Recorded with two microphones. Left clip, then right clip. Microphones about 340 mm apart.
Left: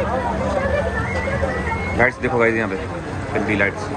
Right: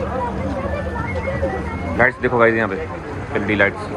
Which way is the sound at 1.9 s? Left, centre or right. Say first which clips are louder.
Right 3 dB; centre.